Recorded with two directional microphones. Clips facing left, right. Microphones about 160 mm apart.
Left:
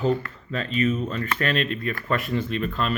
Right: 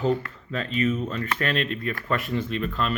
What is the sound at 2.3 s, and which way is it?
Speech, 40° left (ahead or behind).